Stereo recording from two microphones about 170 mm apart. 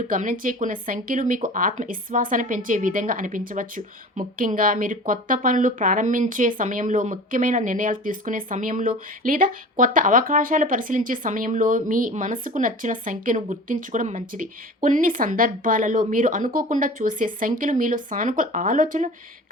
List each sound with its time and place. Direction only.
0.1 s speech: 50° right (ahead or behind)